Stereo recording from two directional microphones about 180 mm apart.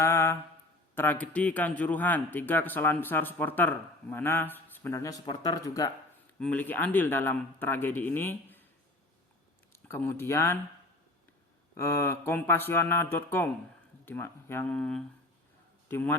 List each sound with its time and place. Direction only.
0.0 s mantra: 15° left (ahead or behind)
0.9 s speech: 10° left (ahead or behind)
6.4 s speech: 10° left (ahead or behind)
9.7 s speech: 15° left (ahead or behind)
11.8 s speech: 15° left (ahead or behind)